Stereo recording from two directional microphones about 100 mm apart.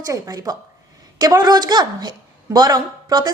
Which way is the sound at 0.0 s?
35° right (ahead or behind).